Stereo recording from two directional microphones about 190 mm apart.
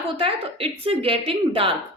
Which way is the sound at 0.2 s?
30° right (ahead or behind).